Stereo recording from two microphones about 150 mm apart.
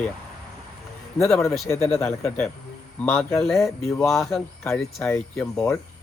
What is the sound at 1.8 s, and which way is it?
Speech, 45° left (ahead or behind).